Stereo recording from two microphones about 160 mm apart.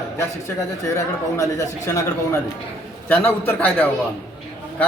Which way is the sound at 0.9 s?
20° left (ahead or behind).